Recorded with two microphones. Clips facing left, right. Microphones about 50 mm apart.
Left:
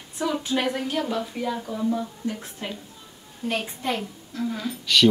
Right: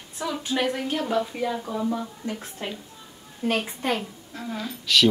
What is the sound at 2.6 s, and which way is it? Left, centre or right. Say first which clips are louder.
Speech: even; right.